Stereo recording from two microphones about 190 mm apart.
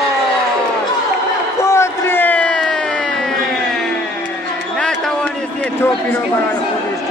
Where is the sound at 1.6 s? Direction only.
15° left (ahead or behind).